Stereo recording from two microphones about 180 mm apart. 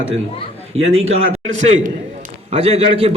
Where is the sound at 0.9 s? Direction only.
40° right (ahead or behind).